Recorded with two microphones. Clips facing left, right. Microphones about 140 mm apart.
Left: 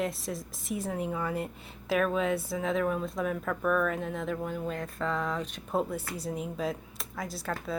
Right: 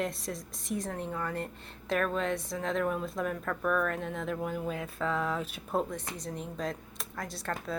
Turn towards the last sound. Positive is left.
turn(degrees=0)  # may be behind; listen again after turning